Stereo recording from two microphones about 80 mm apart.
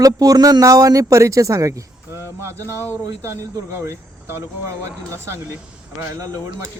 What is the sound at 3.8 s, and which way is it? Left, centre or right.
Speech, right.